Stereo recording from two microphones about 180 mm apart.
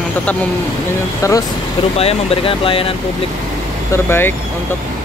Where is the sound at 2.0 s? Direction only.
30° left (ahead or behind).